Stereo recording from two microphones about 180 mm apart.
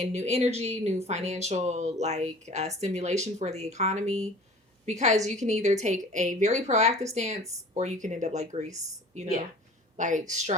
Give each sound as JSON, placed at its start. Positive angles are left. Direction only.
{"t": 0.0, "sound": "speech", "side_deg": -40}